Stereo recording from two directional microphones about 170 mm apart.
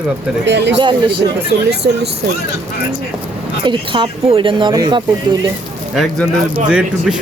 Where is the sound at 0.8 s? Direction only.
30° right (ahead or behind).